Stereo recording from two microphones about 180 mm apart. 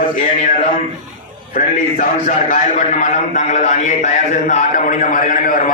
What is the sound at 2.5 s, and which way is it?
A man's voice, 40° left (ahead or behind).